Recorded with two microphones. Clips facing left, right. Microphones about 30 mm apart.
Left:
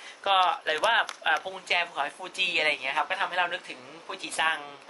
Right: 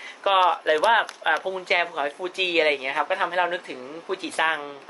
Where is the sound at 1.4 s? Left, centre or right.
Centre.